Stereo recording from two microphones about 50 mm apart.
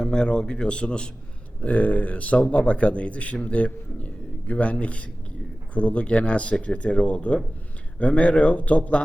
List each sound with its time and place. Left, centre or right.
0.0 s speech: centre
1.6 s speech: left